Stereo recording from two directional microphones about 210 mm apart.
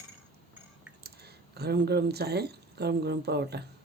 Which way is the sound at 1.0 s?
50° right (ahead or behind).